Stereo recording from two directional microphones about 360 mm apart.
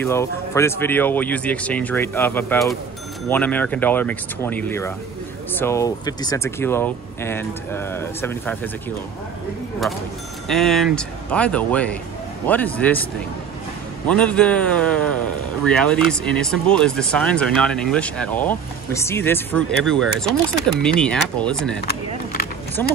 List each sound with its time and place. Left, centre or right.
0.0 s a man's voice: centre
10.5 s a man's voice: centre
14.0 s a man's voice: centre
21.8 s a sound: left